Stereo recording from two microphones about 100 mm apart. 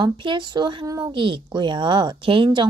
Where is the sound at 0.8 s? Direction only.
35° right (ahead or behind).